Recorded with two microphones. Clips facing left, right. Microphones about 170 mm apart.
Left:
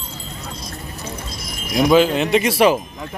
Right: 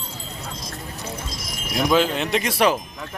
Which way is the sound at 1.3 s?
90° right.